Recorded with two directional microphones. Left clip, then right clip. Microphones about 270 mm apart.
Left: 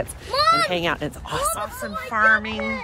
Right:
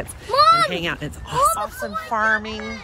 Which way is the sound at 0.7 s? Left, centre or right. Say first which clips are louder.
Left 2 dB; centre.